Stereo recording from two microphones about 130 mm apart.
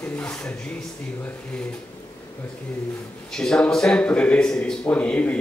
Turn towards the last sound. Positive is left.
turn(degrees=10)  # may be behind; listen again after turning